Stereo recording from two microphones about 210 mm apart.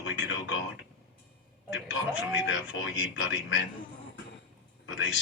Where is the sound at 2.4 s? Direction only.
60° left (ahead or behind).